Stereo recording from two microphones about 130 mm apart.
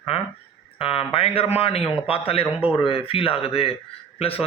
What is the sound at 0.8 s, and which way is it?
Speech, 45° left (ahead or behind).